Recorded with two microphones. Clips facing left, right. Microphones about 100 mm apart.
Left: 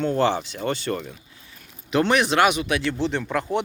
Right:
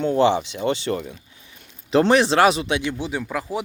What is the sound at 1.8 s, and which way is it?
Speech, 30° right (ahead or behind).